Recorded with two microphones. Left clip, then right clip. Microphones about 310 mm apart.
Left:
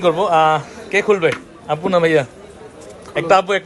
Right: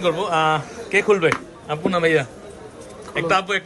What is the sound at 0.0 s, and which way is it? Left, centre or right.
A man's voice, centre.